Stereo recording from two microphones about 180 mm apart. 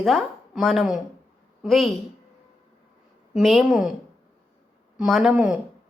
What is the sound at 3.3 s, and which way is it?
Speech, centre (ahead or behind).